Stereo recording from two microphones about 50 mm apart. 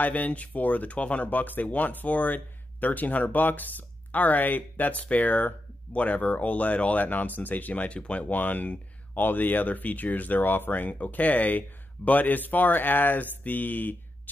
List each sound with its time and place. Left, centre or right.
0.0 s speech: left